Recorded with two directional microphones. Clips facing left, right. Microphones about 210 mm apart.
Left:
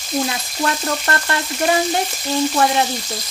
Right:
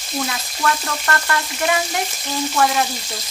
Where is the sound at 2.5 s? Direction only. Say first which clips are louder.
Right 2 dB; 25° left (ahead or behind).